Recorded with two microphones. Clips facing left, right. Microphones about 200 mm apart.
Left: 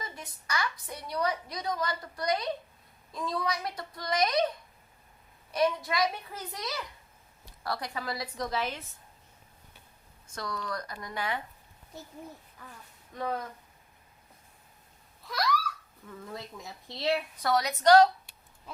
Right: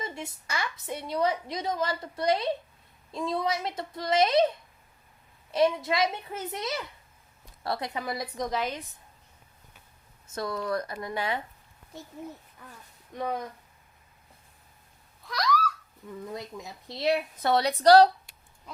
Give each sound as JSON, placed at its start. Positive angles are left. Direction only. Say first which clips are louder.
{"t": 0.0, "sound": "a woman's voice", "louder": "right 6 dB", "side_deg": -25}
{"t": 10.2, "sound": "a woman's voice", "louder": "right 6 dB", "side_deg": -25}
{"t": 13.1, "sound": "speech", "louder": "right 2 dB", "side_deg": -15}
{"t": 16.2, "sound": "a woman's voice", "louder": "right 3 dB", "side_deg": -20}
{"t": 17.5, "sound": "a woman's voice", "louder": "right 3 dB", "side_deg": -30}